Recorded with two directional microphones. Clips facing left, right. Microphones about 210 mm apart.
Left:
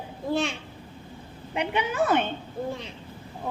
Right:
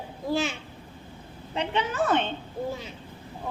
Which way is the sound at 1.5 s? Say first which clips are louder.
Left 1 dB; 10° left (ahead or behind).